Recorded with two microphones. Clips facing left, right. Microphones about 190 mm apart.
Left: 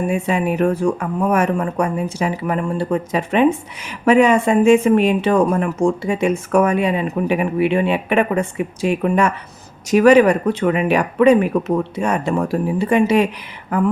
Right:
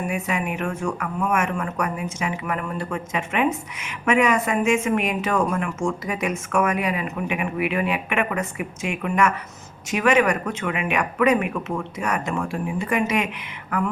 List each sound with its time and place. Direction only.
0.1 s speech: 30° left (ahead or behind)